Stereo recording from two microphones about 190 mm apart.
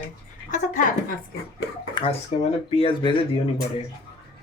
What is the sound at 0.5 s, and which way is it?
Speech, 40° left (ahead or behind).